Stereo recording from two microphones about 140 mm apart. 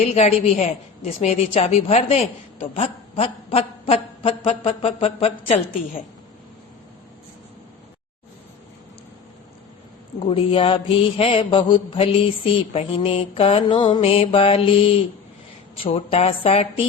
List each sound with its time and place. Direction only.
0.0 s a woman's voice: 45° left (ahead or behind)
10.2 s mantra: 40° left (ahead or behind)